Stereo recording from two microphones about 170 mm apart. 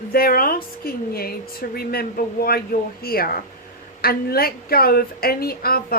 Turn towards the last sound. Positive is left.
turn(degrees=60)  # may be behind; listen again after turning